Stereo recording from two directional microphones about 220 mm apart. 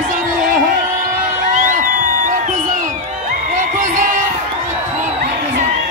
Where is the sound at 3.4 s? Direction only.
35° right (ahead or behind).